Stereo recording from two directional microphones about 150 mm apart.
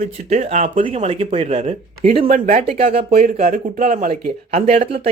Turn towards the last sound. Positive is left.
turn(degrees=-50)  # may be behind; listen again after turning